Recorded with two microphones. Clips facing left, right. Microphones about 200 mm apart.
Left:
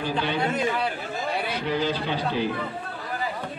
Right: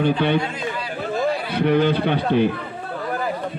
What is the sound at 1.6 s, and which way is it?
Speech, 60° right (ahead or behind).